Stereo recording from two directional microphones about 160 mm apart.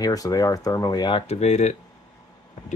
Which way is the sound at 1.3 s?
45° left (ahead or behind).